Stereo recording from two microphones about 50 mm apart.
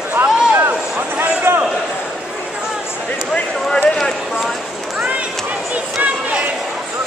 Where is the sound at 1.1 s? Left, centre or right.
Right.